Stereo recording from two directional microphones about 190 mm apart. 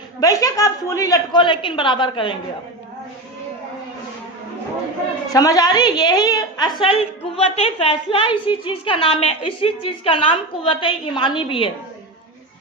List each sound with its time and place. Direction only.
0.2 s a woman's voice: 20° left (ahead or behind)
5.3 s a woman's voice: 20° left (ahead or behind)